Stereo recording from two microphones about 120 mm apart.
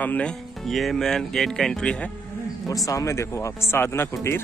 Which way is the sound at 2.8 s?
25° left (ahead or behind).